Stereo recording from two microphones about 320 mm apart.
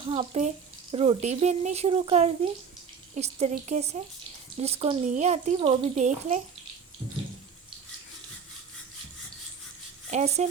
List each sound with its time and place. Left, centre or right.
0.1 s speech: centre
10.1 s speech: centre